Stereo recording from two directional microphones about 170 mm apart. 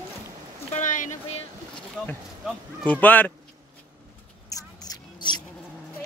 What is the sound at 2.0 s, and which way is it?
Speech, 5° left (ahead or behind).